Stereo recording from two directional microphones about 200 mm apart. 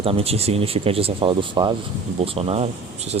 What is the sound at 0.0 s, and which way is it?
Speech, 30° right (ahead or behind).